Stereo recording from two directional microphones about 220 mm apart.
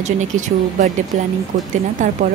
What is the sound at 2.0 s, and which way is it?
Speech, 35° right (ahead or behind).